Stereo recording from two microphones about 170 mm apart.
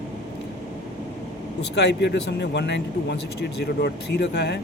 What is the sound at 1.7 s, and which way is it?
Speech, 85° left.